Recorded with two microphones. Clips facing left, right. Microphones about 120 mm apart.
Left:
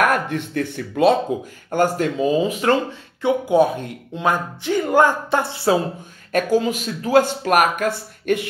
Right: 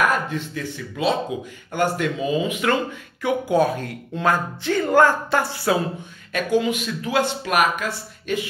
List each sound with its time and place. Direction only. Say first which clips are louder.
0.0 s speech: left 3 dB; 60° left (ahead or behind)
1.7 s speech: left 3 dB; 40° left (ahead or behind); by 5.8 s 25° left (ahead or behind)
6.3 s speech: left 2 dB; 40° left (ahead or behind)